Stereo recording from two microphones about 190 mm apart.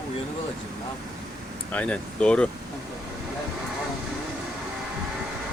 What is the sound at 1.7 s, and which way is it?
Speech, 5° left (ahead or behind).